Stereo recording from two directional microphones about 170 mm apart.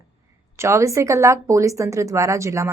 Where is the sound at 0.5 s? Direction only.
15° right (ahead or behind).